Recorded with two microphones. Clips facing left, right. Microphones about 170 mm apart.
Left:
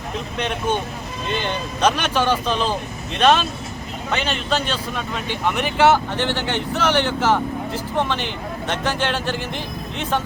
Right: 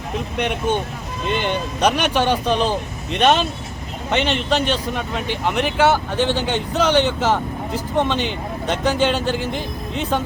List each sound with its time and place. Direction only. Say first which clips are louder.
1.4 s speech: right 1 dB; 15° right (ahead or behind)